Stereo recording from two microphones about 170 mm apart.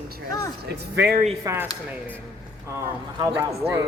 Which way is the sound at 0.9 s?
75° right (ahead or behind).